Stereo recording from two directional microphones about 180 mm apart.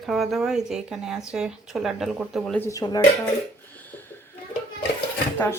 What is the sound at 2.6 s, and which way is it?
Speech, 20° left (ahead or behind).